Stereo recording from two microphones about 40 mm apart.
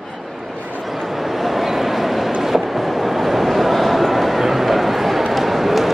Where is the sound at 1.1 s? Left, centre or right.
Centre.